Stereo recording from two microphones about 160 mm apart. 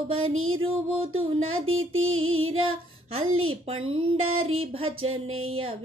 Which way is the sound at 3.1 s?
35° right (ahead or behind).